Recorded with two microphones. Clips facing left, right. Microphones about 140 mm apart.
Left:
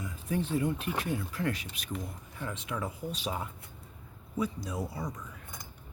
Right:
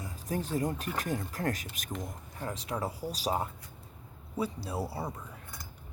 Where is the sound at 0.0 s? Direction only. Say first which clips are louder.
Left 2 dB; 40° right (ahead or behind).